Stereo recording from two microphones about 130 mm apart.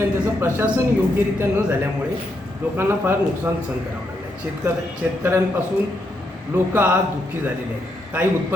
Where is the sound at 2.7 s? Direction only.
20° right (ahead or behind).